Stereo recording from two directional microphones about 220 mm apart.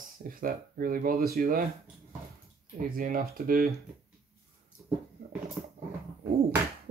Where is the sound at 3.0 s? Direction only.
40° right (ahead or behind).